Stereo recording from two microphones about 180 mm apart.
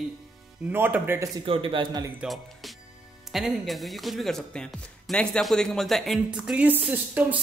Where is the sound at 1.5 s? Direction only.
30° right (ahead or behind).